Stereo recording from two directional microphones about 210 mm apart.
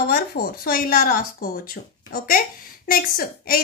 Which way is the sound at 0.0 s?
45° left (ahead or behind).